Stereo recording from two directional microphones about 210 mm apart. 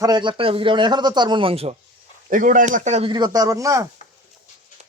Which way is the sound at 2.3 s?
40° right (ahead or behind).